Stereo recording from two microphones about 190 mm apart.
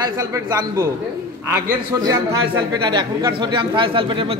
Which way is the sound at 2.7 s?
20° right (ahead or behind).